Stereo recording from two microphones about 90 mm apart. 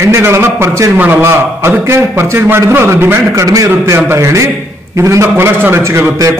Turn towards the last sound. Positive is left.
turn(degrees=-35)  # may be behind; listen again after turning